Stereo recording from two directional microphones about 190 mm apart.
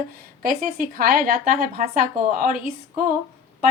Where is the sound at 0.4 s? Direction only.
50° right (ahead or behind).